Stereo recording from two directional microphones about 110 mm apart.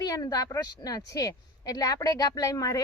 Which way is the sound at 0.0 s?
35° left (ahead or behind).